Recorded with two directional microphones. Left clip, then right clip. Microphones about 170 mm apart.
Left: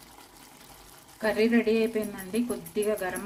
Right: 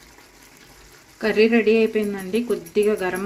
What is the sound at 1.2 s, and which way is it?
Speech, 45° right (ahead or behind).